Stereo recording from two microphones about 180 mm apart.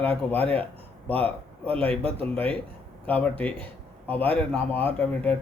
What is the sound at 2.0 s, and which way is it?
Speech, 30° right (ahead or behind).